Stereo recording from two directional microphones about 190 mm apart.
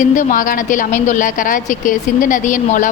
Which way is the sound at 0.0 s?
45° left (ahead or behind).